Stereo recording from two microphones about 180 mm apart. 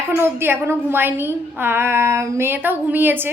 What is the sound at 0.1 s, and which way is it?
A woman's voice, 10° right (ahead or behind).